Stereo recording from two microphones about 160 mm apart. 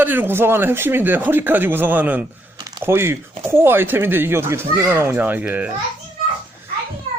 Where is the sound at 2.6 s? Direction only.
25° right (ahead or behind).